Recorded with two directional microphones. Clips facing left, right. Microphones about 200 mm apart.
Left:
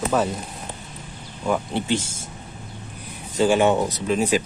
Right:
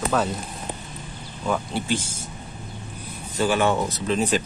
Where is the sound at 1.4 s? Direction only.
20° left (ahead or behind).